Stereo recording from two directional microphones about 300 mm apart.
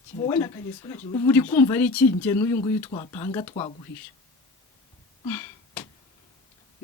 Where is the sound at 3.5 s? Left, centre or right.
Centre.